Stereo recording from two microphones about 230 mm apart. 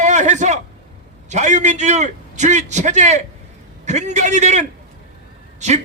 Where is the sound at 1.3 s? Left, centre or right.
Right.